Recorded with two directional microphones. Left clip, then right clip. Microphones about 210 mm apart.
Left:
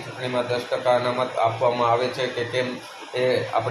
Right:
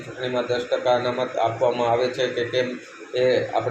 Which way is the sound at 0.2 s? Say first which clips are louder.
Right 1 dB; 5° right (ahead or behind).